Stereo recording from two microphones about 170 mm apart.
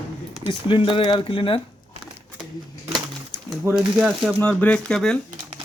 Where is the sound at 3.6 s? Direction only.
5° right (ahead or behind).